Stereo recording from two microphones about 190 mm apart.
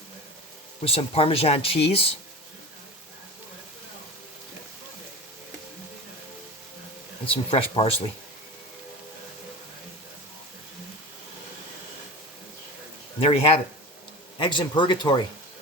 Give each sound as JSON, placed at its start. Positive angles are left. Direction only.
{"t": 0.8, "sound": "speech", "side_deg": 30}
{"t": 7.3, "sound": "speech", "side_deg": 30}
{"t": 13.1, "sound": "speech", "side_deg": 30}